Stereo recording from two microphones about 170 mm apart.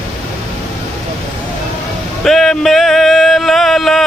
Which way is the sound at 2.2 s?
Centre (ahead or behind).